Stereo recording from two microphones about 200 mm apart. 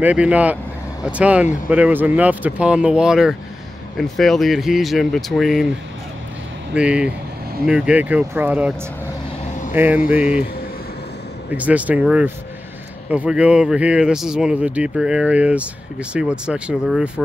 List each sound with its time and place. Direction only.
0.0 s speech: 5° right (ahead or behind)
6.7 s speech: 5° right (ahead or behind)
9.8 s speech: 10° right (ahead or behind)
11.5 s speech: 5° right (ahead or behind)